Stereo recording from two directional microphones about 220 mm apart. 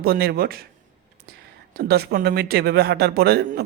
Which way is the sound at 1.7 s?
45° right (ahead or behind).